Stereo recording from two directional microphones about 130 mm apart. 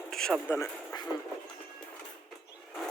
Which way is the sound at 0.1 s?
5° left (ahead or behind).